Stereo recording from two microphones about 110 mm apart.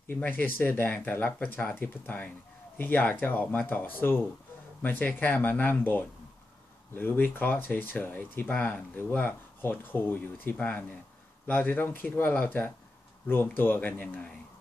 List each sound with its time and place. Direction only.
0.1 s speech: 15° left (ahead or behind)